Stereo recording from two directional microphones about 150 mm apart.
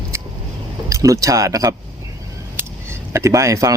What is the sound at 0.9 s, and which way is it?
Speech, 20° right (ahead or behind).